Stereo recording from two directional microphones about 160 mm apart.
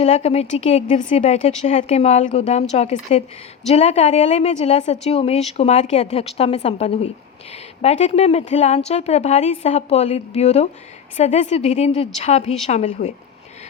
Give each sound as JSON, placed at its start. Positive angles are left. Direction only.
{"t": 0.0, "sound": "a woman's voice", "side_deg": 40}